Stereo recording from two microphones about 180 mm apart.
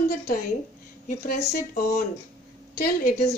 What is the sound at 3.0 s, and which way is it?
Speech, 40° left (ahead or behind).